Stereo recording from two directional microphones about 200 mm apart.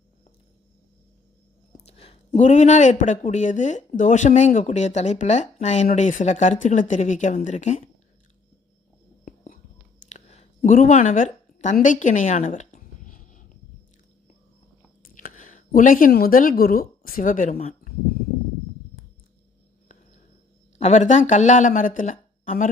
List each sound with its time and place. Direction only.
1.8 s speech: 30° left (ahead or behind)
9.2 s whispering: 40° left (ahead or behind)
10.1 s a sound: 35° left (ahead or behind)
15.1 s speech: 40° left (ahead or behind)
20.7 s speech: 35° left (ahead or behind)